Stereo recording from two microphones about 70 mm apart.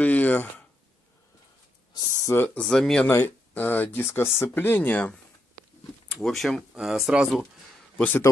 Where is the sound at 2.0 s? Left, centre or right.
Left.